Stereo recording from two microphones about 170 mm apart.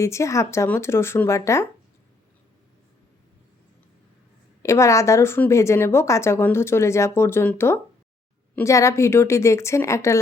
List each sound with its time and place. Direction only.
0.0 s a woman's voice: 15° left (ahead or behind)
4.6 s a woman's voice: 15° left (ahead or behind)